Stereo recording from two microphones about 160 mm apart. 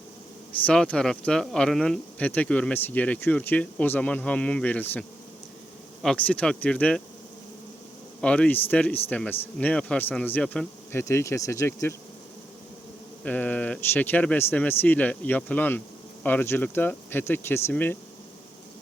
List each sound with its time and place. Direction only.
0.6 s speech: 5° left (ahead or behind)
8.2 s speech: 5° left (ahead or behind)
10.9 s speech: 15° left (ahead or behind)
13.2 s speech: 10° left (ahead or behind)